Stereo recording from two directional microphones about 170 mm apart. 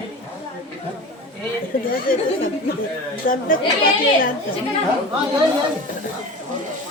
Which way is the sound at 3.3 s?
55° left (ahead or behind).